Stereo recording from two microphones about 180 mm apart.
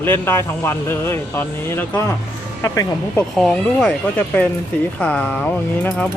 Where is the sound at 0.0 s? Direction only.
15° left (ahead or behind).